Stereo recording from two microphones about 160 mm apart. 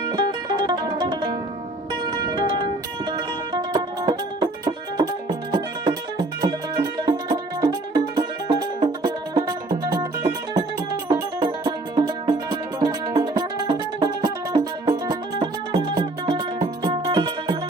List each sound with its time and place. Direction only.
0.0 s music: 25° right (ahead or behind)